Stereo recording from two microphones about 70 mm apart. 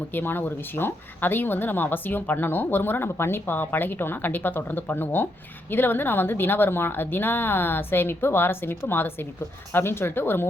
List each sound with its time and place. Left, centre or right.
0.1 s a woman's voice: left